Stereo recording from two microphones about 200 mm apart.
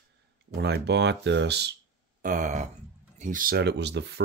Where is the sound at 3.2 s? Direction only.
45° right (ahead or behind).